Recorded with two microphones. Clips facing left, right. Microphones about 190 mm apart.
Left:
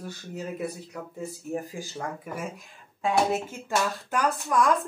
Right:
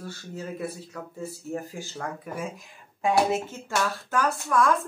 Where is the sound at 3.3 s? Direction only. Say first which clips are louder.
Even; 10° left (ahead or behind).